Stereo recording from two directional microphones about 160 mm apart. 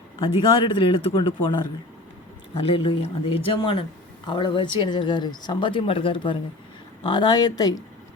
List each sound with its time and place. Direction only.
0.2 s speech: 35° left (ahead or behind)
2.6 s speech: 35° left (ahead or behind)